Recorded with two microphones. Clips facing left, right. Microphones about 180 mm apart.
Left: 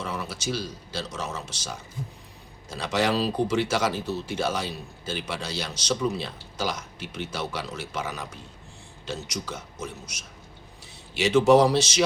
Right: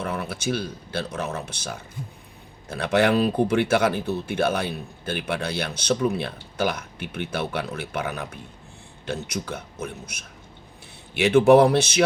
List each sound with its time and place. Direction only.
0.0 s speech: 55° right (ahead or behind)